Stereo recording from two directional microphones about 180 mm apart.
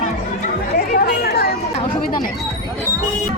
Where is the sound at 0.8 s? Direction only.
55° left (ahead or behind).